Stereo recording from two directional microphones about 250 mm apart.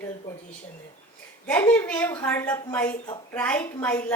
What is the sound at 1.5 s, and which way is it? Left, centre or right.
A woman's voice, centre.